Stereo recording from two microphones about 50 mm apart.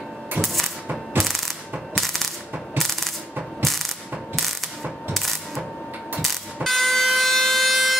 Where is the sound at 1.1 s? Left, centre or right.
Right.